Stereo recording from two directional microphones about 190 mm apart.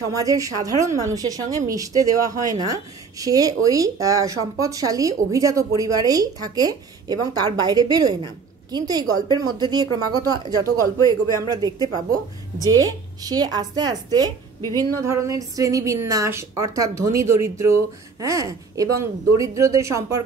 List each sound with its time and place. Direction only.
0.1 s a woman's voice: 20° right (ahead or behind)